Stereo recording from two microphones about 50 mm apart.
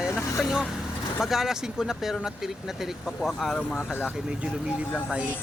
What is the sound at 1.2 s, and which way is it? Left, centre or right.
Speech, centre.